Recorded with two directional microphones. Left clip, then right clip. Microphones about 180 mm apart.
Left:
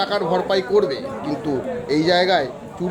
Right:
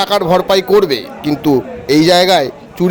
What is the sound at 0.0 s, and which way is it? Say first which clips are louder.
A man's voice: right 8 dB; 35° right (ahead or behind).